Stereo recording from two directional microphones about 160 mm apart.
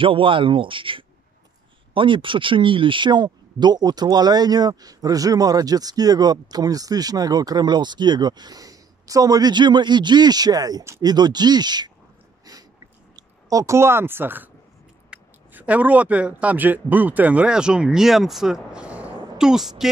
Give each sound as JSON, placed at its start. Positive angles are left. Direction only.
{"t": 0.0, "sound": "speech", "side_deg": -35}
{"t": 13.1, "sound": "speech", "side_deg": -20}